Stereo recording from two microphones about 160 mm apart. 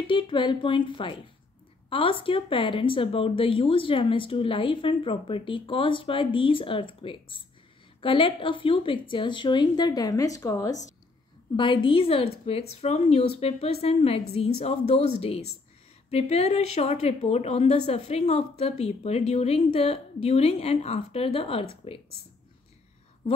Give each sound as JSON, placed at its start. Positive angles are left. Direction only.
{"t": 0.0, "sound": "a woman's voice", "side_deg": 30}